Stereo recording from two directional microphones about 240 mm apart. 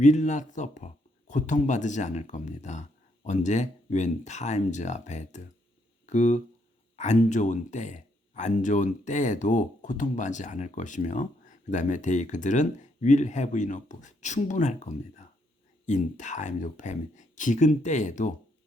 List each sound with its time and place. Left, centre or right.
0.0 s speech: left